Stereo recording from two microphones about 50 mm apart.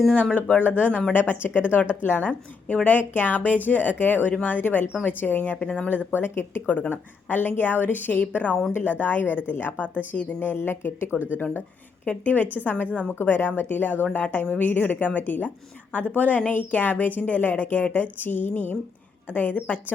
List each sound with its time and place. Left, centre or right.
0.3 s a woman's voice: left
5.6 s speech: left
5.9 s a woman's voice: left
8.7 s a woman's voice: left
12.0 s a woman's voice: left